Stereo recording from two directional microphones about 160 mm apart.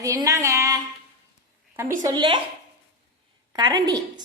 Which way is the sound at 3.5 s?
25° right (ahead or behind).